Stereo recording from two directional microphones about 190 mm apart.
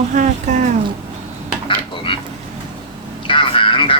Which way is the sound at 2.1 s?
25° left (ahead or behind).